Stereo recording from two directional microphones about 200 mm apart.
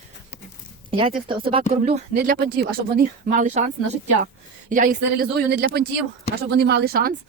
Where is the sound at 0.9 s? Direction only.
25° right (ahead or behind).